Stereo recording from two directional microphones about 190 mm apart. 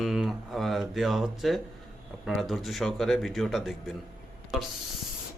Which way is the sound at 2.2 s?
Centre (ahead or behind).